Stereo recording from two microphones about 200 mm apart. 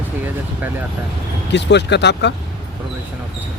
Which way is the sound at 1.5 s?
60° left (ahead or behind).